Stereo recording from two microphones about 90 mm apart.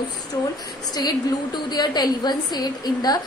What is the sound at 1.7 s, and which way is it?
A woman's voice, 50° left (ahead or behind).